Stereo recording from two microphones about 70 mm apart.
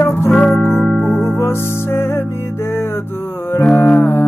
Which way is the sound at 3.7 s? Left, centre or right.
Left.